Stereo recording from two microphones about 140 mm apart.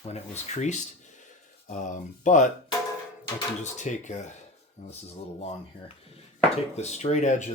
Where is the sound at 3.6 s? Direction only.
60° left (ahead or behind).